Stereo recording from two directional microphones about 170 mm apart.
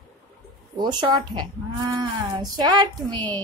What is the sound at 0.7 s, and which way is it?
Speech, 25° right (ahead or behind).